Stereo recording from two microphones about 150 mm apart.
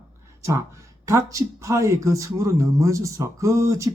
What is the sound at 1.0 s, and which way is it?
Speech, 20° right (ahead or behind).